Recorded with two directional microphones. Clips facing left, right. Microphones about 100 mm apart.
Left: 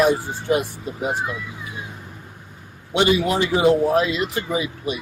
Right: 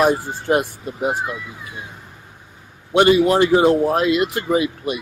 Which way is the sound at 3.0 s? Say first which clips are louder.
Right 5 dB; 50° right (ahead or behind).